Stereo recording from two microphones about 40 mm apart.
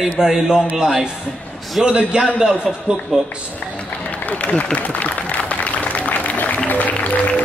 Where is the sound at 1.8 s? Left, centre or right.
Right.